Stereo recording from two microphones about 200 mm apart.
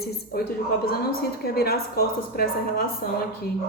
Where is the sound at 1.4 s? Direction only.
50° left (ahead or behind).